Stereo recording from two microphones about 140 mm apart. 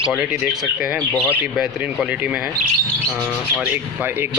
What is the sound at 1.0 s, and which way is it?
Speech, 15° left (ahead or behind).